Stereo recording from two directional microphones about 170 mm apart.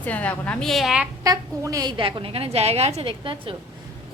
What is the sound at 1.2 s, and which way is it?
A woman's voice, 20° right (ahead or behind).